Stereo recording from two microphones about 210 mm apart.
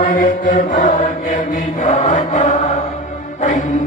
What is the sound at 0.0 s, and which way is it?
Mantra, 40° left (ahead or behind).